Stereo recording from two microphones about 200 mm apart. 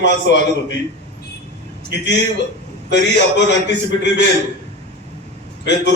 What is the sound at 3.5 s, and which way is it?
Speech, 60° left (ahead or behind).